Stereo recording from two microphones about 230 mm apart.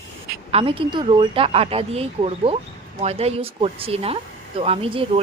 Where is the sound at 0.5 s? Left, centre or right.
Right.